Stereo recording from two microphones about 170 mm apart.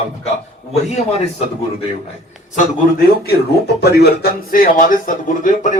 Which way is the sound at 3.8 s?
75° left (ahead or behind).